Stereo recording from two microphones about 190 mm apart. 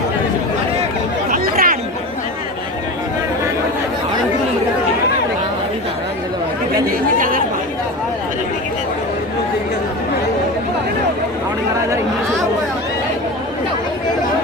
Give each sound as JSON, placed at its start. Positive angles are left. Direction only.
{"t": 1.3, "sound": "chatter", "side_deg": -50}
{"t": 7.2, "sound": "chatter", "side_deg": -45}